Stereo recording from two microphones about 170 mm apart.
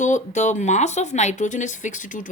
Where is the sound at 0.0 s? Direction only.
45° left (ahead or behind).